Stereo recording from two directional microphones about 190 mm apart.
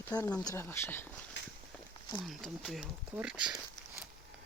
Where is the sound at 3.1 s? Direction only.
5° right (ahead or behind).